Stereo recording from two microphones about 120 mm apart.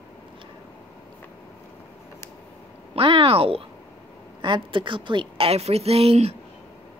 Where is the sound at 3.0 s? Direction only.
45° right (ahead or behind).